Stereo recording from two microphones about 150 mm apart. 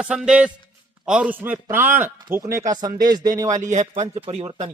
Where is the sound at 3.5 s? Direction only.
55° right (ahead or behind).